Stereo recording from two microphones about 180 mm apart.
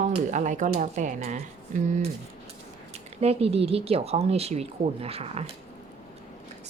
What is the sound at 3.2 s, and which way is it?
Speech, 35° right (ahead or behind).